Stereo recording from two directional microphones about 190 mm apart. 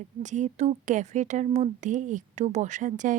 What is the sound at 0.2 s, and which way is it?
Speech, 40° right (ahead or behind).